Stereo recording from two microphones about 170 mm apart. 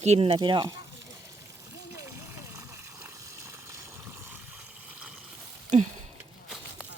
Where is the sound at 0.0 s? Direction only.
35° right (ahead or behind).